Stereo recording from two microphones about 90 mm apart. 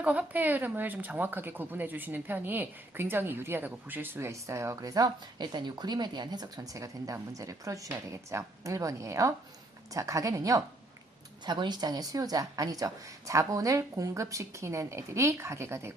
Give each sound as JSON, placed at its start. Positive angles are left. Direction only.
{"t": 0.0, "sound": "a woman's voice", "side_deg": -15}
{"t": 11.4, "sound": "a woman's voice", "side_deg": -55}